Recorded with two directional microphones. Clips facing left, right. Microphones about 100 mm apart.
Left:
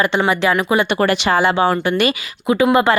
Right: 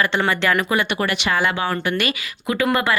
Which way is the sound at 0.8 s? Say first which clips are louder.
Left 6 dB; 35° left (ahead or behind).